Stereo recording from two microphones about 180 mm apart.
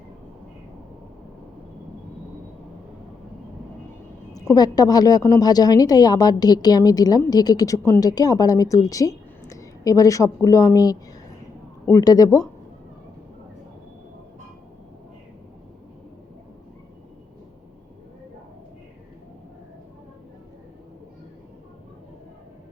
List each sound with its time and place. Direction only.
4.4 s a woman's voice: 20° left (ahead or behind)